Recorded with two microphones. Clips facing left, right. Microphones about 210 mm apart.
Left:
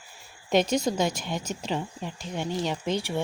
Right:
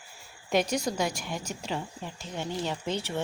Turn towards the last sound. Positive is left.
turn(degrees=15)  # may be behind; listen again after turning